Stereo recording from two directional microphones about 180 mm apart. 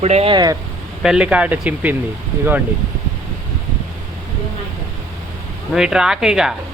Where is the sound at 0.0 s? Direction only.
35° right (ahead or behind).